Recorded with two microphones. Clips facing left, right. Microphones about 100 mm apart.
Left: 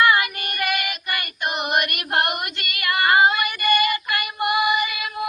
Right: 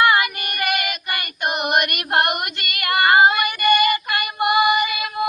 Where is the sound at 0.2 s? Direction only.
60° right (ahead or behind).